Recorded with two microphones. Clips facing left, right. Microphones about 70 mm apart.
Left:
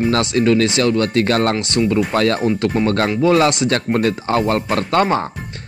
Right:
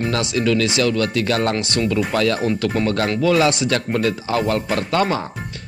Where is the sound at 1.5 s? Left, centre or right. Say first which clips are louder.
Left 3 dB; left.